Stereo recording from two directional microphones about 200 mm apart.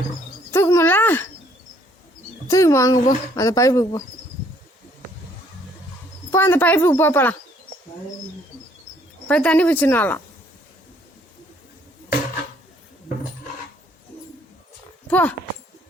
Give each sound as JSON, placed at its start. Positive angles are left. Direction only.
{"t": 0.5, "sound": "speech", "side_deg": 15}
{"t": 2.5, "sound": "speech", "side_deg": 15}
{"t": 6.3, "sound": "speech", "side_deg": 10}
{"t": 9.2, "sound": "speech", "side_deg": 5}
{"t": 15.0, "sound": "speech", "side_deg": 10}